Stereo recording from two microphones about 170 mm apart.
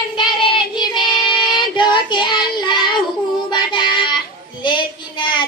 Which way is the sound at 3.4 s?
25° left (ahead or behind).